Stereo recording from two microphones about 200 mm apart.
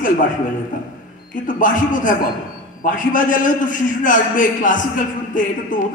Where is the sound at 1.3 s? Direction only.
40° left (ahead or behind).